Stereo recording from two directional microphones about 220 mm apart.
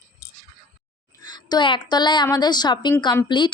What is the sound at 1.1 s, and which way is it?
A woman's voice, 15° left (ahead or behind).